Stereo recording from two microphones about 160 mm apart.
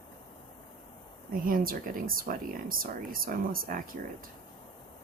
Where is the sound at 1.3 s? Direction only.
60° right (ahead or behind).